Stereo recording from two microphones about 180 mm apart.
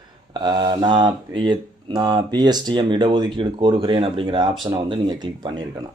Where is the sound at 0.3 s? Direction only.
25° right (ahead or behind).